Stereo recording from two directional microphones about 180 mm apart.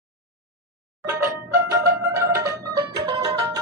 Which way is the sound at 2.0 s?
15° right (ahead or behind).